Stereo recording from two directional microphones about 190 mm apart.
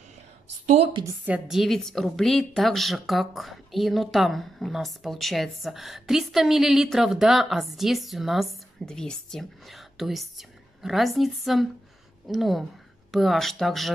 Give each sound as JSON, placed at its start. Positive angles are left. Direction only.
{"t": 0.7, "sound": "a woman's voice", "side_deg": -35}
{"t": 1.0, "sound": "a woman's voice", "side_deg": -10}